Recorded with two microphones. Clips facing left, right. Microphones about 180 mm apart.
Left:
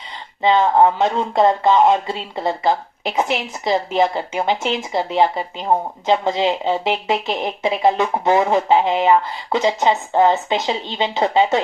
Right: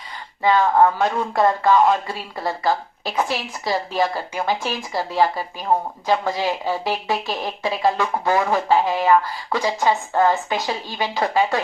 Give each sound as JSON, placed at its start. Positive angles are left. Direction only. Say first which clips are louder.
{"t": 0.4, "sound": "speech", "louder": "left 2 dB", "side_deg": 20}